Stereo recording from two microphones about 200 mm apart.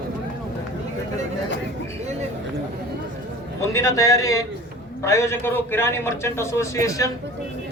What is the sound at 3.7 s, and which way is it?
A man's voice, 15° left (ahead or behind).